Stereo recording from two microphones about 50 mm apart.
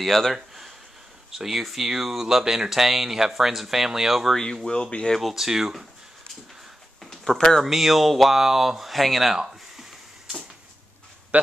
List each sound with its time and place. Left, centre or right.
0.0 s speech: centre
4.6 s speech: centre
5.3 s speech: centre
7.0 s a sound: centre
7.6 s speech: centre